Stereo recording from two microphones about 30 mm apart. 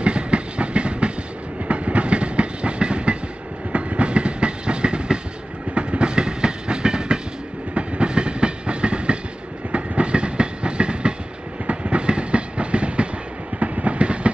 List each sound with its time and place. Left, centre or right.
0.0 s train: right